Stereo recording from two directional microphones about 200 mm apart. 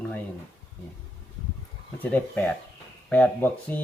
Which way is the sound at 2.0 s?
10° left (ahead or behind).